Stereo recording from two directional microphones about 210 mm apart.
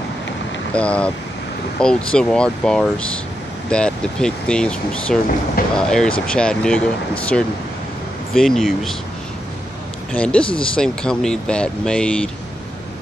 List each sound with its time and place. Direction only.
0.7 s speech: 5° left (ahead or behind)
10.1 s speech: 5° left (ahead or behind)
10.4 s speech: 25° left (ahead or behind)
10.8 s speech: 5° left (ahead or behind)